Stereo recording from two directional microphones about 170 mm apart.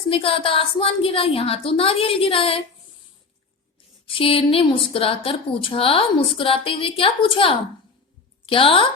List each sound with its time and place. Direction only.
0.1 s a woman's voice: 35° left (ahead or behind)
4.0 s a woman's voice: 30° left (ahead or behind)